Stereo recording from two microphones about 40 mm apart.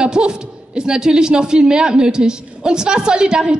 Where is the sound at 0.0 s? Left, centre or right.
Centre.